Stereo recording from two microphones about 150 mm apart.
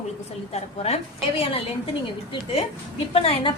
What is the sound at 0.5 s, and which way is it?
A woman's voice, 45° left (ahead or behind).